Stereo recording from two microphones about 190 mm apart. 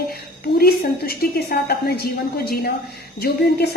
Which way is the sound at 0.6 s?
55° left (ahead or behind).